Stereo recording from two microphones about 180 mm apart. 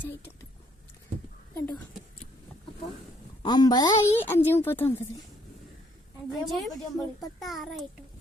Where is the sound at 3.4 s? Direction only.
25° left (ahead or behind).